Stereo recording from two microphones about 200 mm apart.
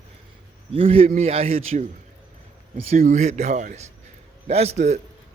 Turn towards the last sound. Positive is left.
turn(degrees=-35)  # may be behind; listen again after turning